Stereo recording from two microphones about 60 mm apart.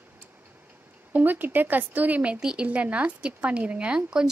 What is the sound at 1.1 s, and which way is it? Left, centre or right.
Speech, right.